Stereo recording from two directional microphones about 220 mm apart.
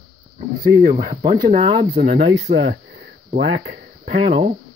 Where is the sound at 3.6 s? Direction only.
40° right (ahead or behind).